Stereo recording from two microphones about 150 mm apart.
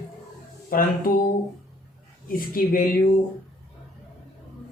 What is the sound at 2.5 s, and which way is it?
Speech, 70° left (ahead or behind).